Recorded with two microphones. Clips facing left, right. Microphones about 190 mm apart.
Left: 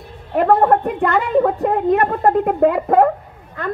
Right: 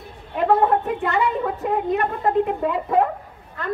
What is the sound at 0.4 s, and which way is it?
A woman's voice, 55° left (ahead or behind).